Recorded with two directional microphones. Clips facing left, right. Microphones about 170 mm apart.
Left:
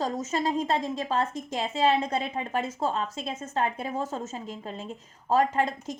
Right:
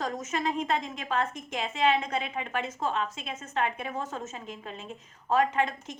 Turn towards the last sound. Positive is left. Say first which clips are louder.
# left 2 dB
turn(degrees=35)  # may be behind; listen again after turning